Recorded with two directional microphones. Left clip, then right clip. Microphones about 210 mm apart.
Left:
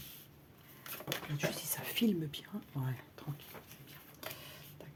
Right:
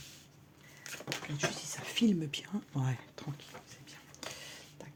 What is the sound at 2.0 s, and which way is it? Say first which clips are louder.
Speech: right 5 dB; 25° right (ahead or behind).